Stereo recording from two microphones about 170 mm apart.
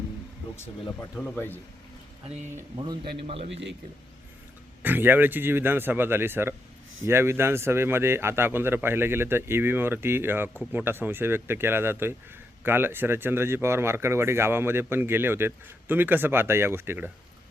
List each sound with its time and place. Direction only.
1.2 s speech: 10° left (ahead or behind)
2.2 s a man's voice: 40° right (ahead or behind)
2.7 s a man's voice: 25° right (ahead or behind)
3.5 s speech: 90° right
4.8 s speech: 10° right (ahead or behind)